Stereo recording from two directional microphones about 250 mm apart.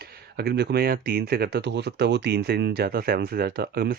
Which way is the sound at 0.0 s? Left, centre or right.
Right.